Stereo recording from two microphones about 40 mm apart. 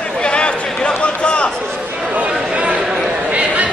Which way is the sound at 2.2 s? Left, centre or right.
Right.